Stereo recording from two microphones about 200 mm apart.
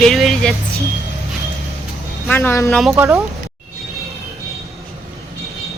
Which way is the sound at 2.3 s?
10° left (ahead or behind).